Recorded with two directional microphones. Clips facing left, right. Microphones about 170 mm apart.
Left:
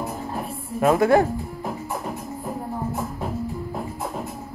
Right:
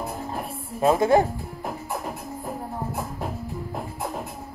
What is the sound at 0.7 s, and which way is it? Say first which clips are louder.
Speech: left 1 dB; 25° right (ahead or behind).